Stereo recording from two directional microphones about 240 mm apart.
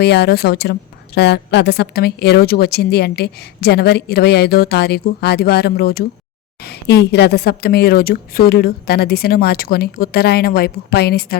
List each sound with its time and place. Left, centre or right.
0.0 s a woman's voice: left